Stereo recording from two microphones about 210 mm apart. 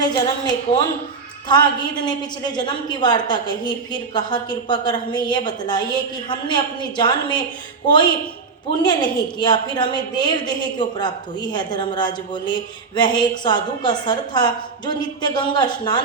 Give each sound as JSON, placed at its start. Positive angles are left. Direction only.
{"t": 0.0, "sound": "a woman's voice", "side_deg": 20}